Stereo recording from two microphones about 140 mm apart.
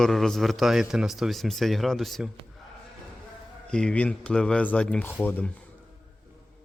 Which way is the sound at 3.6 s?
5° left (ahead or behind).